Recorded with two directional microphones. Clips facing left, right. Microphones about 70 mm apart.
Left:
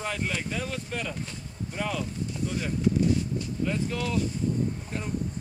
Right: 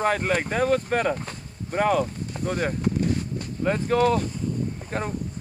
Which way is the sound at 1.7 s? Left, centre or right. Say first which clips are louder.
Right 10 dB; right.